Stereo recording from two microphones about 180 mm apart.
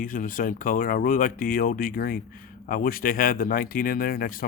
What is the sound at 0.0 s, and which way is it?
Speech, 45° left (ahead or behind).